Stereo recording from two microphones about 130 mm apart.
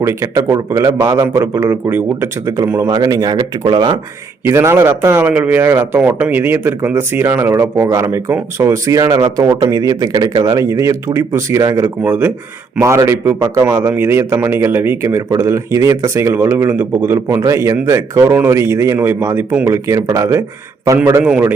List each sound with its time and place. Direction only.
0.0 s speech: 20° right (ahead or behind)
4.4 s speech: 20° right (ahead or behind)